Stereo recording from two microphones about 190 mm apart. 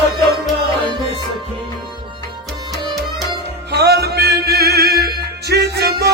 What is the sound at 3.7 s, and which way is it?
Music, 60° right (ahead or behind).